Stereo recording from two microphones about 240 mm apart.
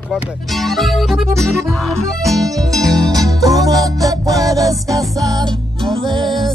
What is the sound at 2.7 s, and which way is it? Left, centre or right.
Music, centre.